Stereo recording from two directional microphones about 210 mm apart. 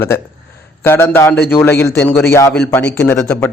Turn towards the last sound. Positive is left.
turn(degrees=10)  # may be behind; listen again after turning